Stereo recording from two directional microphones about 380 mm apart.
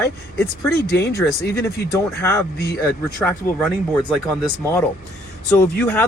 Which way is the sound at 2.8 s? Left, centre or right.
Centre.